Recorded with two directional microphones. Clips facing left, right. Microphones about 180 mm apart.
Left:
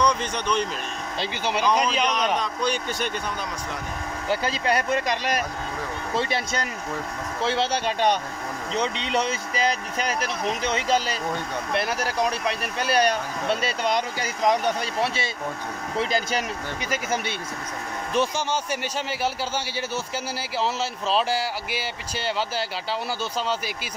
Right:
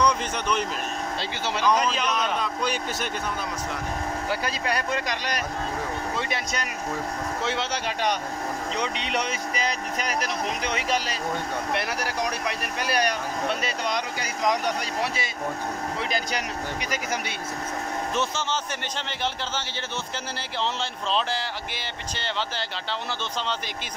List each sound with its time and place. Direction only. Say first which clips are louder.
0.0 s a man's voice: left 1 dB; 5° right (ahead or behind)
1.4 s speech: left 1 dB; 15° left (ahead or behind)
2.3 s speech: left 2 dB; 5° right (ahead or behind)
4.3 s speech: left 6 dB; 25° left (ahead or behind)
10.6 s speech: left 6 dB; 25° left (ahead or behind)
18.1 s speech: left 6 dB; 10° left (ahead or behind)